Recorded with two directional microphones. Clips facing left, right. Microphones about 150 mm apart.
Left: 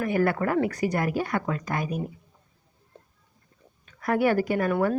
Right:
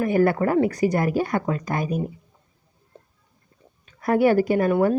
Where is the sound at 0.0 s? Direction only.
35° right (ahead or behind).